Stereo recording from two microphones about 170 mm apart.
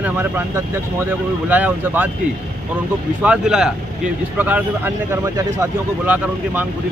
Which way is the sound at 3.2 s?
5° right (ahead or behind).